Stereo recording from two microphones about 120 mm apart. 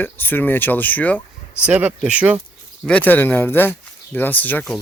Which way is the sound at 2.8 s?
10° left (ahead or behind).